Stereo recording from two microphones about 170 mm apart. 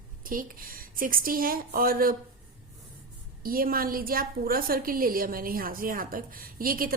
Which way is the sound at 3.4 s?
60° right (ahead or behind).